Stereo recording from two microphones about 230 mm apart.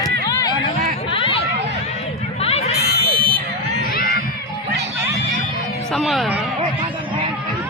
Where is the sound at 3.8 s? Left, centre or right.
Left.